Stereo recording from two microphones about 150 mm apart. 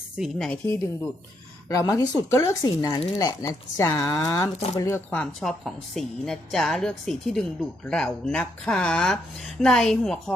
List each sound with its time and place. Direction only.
0.2 s a woman's voice: 5° left (ahead or behind)
1.7 s a woman's voice: 25° left (ahead or behind); by 10.3 s 5° left (ahead or behind)